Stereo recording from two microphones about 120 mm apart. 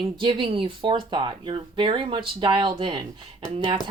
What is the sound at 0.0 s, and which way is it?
Speech, 45° right (ahead or behind).